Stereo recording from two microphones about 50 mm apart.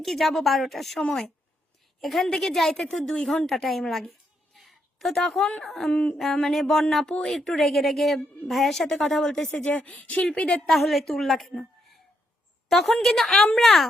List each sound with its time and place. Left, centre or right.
0.0 s a woman's voice: centre
4.5 s a sound: centre
5.6 s a woman's voice: centre
5.9 s speech: left
6.5 s a woman's voice: centre
9.5 s speech: left
10.7 s a woman's voice: centre
12.6 s a sound: centre
13.0 s a woman's voice: centre